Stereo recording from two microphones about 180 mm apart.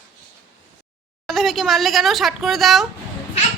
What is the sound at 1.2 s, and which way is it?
Speech, centre (ahead or behind).